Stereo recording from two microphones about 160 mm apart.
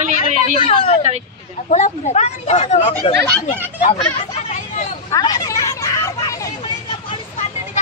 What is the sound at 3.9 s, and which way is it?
Hubbub, 40° left (ahead or behind).